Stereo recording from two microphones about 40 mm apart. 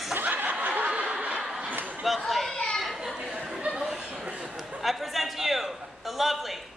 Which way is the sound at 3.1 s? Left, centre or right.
Right.